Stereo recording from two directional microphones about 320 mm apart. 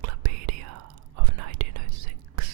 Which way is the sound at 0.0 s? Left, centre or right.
Right.